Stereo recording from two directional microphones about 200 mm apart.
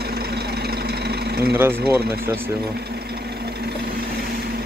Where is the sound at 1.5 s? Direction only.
10° right (ahead or behind).